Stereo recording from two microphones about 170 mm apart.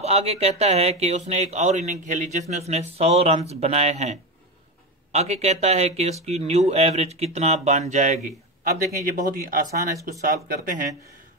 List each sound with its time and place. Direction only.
0.0 s speech: 40° right (ahead or behind); by 10.9 s 55° right (ahead or behind)